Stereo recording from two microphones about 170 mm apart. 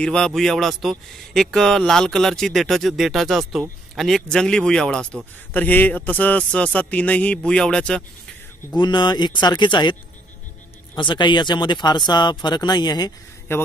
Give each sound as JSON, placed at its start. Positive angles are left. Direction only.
{"t": 0.0, "sound": "a man's voice", "side_deg": 5}
{"t": 8.7, "sound": "speech", "side_deg": 25}
{"t": 11.0, "sound": "speech", "side_deg": 25}